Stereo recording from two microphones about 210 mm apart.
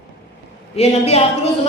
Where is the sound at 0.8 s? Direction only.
30° left (ahead or behind).